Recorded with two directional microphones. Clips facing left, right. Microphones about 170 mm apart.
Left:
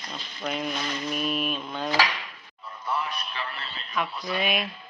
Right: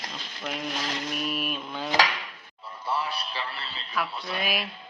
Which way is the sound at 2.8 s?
30° right (ahead or behind).